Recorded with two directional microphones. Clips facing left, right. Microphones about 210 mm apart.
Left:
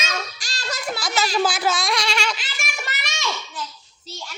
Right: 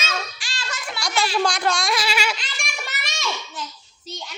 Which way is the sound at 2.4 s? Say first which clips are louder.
Left 1 dB; 5° left (ahead or behind).